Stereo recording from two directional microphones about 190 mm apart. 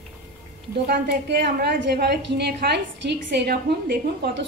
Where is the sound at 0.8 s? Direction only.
60° right (ahead or behind).